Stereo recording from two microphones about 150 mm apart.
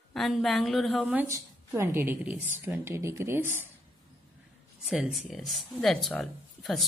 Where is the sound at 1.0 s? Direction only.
10° right (ahead or behind).